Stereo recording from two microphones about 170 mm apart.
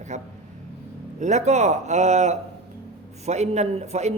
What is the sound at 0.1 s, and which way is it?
Speech, 45° right (ahead or behind).